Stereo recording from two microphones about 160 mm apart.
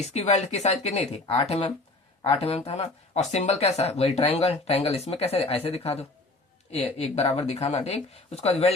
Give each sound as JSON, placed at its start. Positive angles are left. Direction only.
{"t": 0.1, "sound": "speech", "side_deg": 45}